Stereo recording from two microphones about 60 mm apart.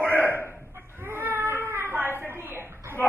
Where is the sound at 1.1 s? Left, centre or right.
Right.